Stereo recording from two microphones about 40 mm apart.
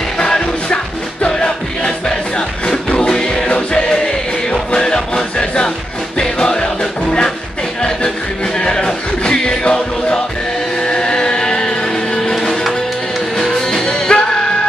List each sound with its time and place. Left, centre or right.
0.2 s music: left
2.0 s music: left
8.5 s music: centre
13.8 s music: left